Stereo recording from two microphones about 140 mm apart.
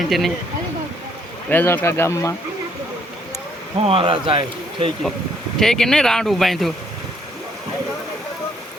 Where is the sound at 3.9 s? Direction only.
40° right (ahead or behind).